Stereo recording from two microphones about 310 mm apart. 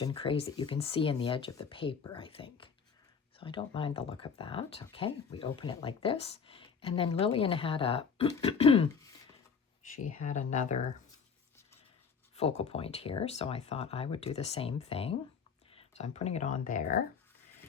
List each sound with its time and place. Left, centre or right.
0.0 s speech: centre
9.9 s speech: left
12.4 s speech: centre